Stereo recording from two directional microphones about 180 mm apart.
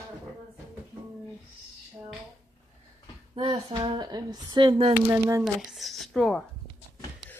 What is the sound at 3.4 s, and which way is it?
Speech, 25° right (ahead or behind).